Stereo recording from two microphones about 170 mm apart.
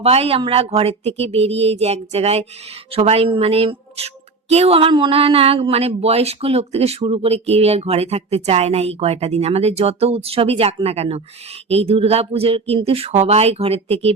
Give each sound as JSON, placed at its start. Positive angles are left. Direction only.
{"t": 0.0, "sound": "a woman's voice", "side_deg": -35}